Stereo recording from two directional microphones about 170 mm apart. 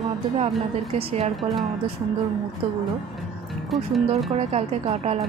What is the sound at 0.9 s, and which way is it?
Speech, 35° right (ahead or behind).